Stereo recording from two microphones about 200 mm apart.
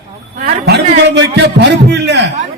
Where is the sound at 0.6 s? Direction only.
55° right (ahead or behind).